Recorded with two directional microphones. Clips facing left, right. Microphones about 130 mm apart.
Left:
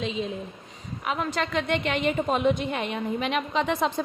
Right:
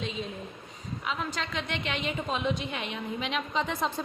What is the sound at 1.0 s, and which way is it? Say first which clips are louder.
A woman's voice: left 6 dB; 60° left (ahead or behind).